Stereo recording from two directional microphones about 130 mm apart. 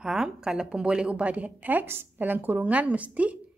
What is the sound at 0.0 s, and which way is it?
A woman's voice, 5° right (ahead or behind).